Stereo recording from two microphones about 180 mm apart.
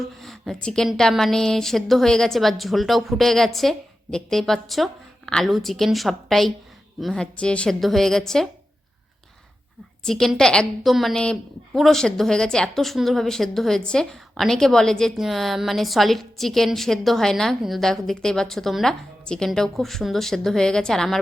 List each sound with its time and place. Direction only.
0.2 s a woman's voice: centre (ahead or behind)
10.0 s a woman's voice: centre (ahead or behind)